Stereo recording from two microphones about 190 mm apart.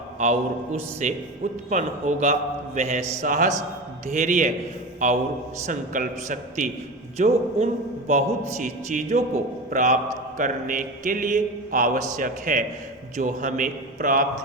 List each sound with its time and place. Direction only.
0.2 s a man's voice: 40° right (ahead or behind)